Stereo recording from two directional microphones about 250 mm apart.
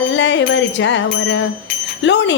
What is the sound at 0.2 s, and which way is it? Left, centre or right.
Wind chime, left.